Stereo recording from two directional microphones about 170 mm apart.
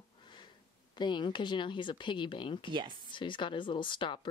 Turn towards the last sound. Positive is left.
turn(degrees=30)  # may be behind; listen again after turning